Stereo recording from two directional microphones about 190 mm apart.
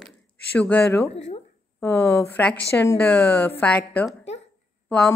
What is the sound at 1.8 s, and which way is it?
Speech, 10° left (ahead or behind).